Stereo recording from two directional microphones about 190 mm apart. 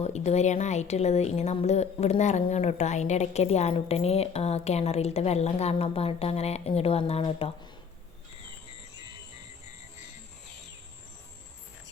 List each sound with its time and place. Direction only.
0.0 s a woman's voice: 35° left (ahead or behind)